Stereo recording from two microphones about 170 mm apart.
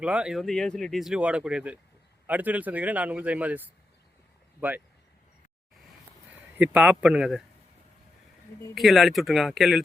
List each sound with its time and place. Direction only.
0.0 s a man's voice: 5° right (ahead or behind)
6.6 s speech: 10° right (ahead or behind)
8.7 s speech: centre (ahead or behind)